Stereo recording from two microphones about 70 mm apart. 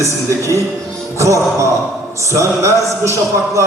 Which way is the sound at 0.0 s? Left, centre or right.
Right.